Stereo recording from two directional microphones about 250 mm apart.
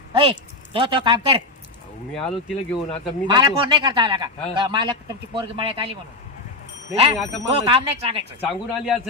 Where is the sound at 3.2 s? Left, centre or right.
Centre.